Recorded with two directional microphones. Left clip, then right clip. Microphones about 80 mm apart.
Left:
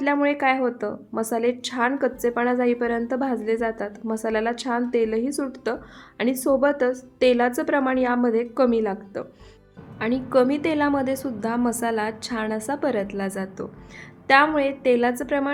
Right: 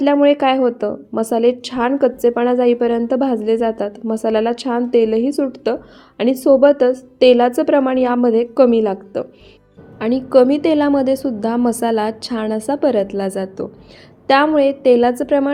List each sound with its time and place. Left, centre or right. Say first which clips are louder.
0.0 s a woman's voice: right 8 dB; right